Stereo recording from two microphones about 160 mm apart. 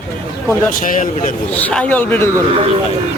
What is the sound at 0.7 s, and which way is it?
Speech, 60° left (ahead or behind).